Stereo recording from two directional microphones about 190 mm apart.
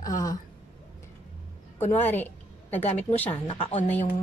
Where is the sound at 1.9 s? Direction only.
10° left (ahead or behind).